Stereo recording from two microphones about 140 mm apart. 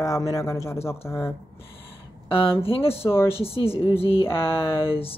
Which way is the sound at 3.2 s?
45° left (ahead or behind).